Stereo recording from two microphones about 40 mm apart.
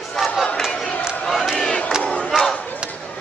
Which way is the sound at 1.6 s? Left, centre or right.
Centre.